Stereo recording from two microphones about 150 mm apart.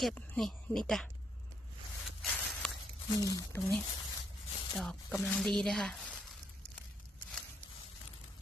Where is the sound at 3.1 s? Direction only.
25° left (ahead or behind).